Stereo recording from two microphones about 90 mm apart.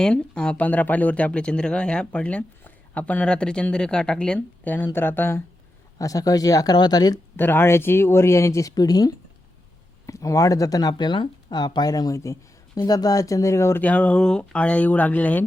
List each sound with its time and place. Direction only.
0.0 s speech: 10° left (ahead or behind)
4.4 s speech: 20° left (ahead or behind)
6.0 s speech: 40° left (ahead or behind)
7.3 s speech: 25° left (ahead or behind)
13.8 s speech: 15° left (ahead or behind)